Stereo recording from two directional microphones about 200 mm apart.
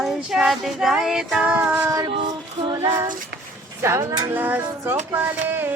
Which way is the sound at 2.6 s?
15° right (ahead or behind).